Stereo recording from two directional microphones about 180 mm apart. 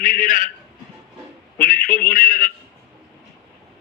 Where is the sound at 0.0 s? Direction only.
50° left (ahead or behind).